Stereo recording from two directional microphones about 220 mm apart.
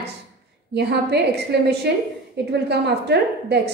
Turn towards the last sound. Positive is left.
turn(degrees=-50)  # may be behind; listen again after turning